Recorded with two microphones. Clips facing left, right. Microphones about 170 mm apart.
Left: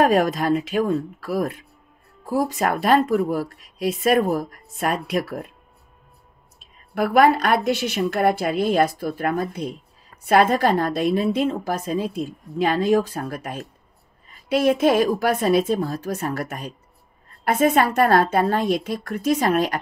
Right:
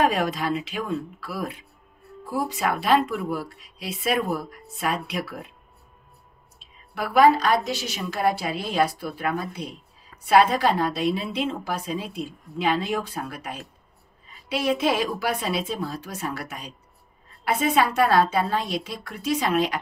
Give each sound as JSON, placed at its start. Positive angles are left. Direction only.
{"t": 0.0, "sound": "a woman's voice", "side_deg": 45}
{"t": 6.6, "sound": "a woman's voice", "side_deg": 50}